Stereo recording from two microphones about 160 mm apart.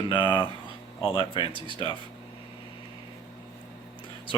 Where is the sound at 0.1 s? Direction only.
30° left (ahead or behind).